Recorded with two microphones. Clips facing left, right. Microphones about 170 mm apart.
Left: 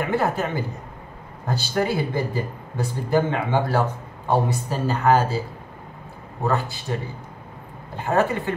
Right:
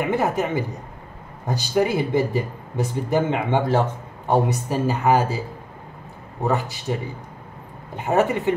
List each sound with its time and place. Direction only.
0.0 s speech: 15° right (ahead or behind)
6.4 s speech: 15° right (ahead or behind)